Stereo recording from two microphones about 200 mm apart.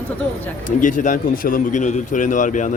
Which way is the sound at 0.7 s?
40° left (ahead or behind).